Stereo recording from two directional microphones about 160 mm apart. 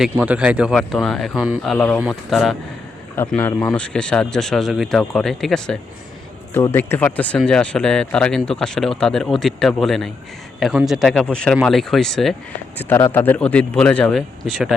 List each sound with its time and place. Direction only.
0.0 s speech: 5° right (ahead or behind)
3.2 s a man's voice: 15° left (ahead or behind)
6.5 s speech: 15° left (ahead or behind)
12.8 s a man's voice: 15° left (ahead or behind)